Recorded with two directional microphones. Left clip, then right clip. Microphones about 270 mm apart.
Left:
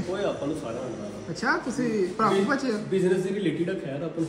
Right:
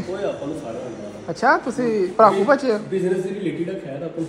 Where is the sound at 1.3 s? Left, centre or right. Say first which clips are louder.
Right 9 dB; centre.